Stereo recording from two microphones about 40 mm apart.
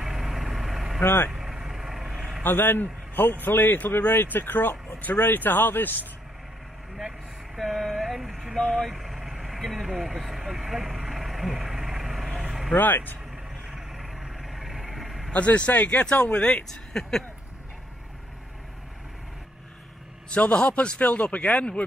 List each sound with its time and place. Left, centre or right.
0.0 s vehicle: centre
1.0 s a man's voice: left
1.3 s vehicle: centre
2.4 s a man's voice: left
7.5 s vehicle: centre
8.5 s speech: centre
8.8 s speech: centre
11.5 s vehicle: centre
12.7 s speech: left
13.7 s vehicle: centre
15.3 s speech: left
17.0 s speech: centre
20.2 s a man's voice: left